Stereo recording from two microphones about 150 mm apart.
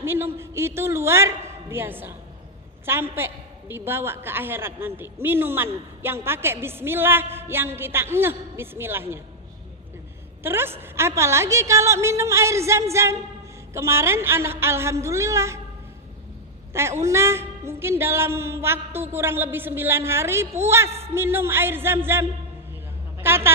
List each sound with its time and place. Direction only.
0.0 s a woman's voice: 15° right (ahead or behind)
10.4 s a woman's voice: 15° right (ahead or behind)
16.7 s a woman's voice: 15° right (ahead or behind)